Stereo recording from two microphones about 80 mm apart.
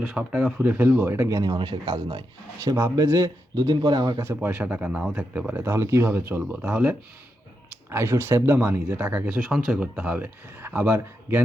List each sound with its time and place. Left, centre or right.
0.0 s a man's voice: centre; by 1.3 s right
1.3 s speech: right
1.5 s speech: right
2.9 s speech: right
4.6 s a man's voice: centre
5.6 s speech: right
6.7 s a man's voice: centre
7.9 s speech: right
9.0 s a man's voice: centre
9.3 s speech: centre
10.0 s speech: centre